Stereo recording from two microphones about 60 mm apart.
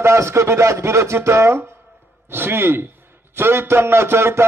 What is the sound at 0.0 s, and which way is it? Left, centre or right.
A man's voice, right.